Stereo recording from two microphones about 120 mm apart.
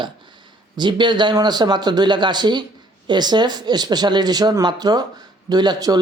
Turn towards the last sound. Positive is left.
turn(degrees=-35)  # may be behind; listen again after turning